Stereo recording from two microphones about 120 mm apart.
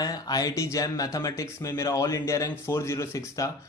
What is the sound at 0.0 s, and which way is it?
A man's voice, 30° left (ahead or behind).